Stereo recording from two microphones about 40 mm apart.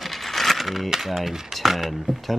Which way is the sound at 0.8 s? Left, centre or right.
Centre.